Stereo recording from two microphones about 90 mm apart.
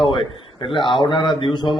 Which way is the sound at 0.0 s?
65° left (ahead or behind).